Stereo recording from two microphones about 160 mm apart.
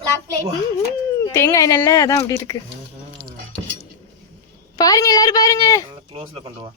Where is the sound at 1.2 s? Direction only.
20° left (ahead or behind).